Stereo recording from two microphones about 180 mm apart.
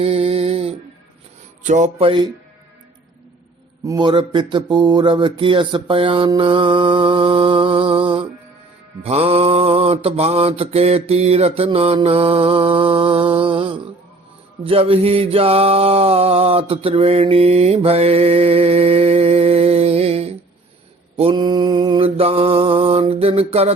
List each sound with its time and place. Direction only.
0.0 s a sound: 35° right (ahead or behind)
1.6 s mantra: 40° right (ahead or behind)
3.8 s speech: 25° right (ahead or behind)
9.0 s mantra: 35° right (ahead or behind)